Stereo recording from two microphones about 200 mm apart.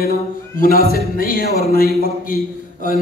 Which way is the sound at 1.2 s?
45° left (ahead or behind).